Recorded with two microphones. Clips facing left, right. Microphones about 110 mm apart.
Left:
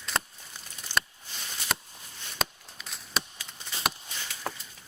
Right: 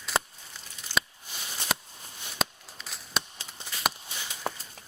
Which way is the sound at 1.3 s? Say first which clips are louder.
Right 1 dB; 5° right (ahead or behind).